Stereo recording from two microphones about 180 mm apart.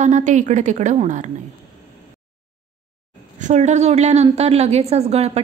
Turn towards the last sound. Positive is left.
turn(degrees=-35)  # may be behind; listen again after turning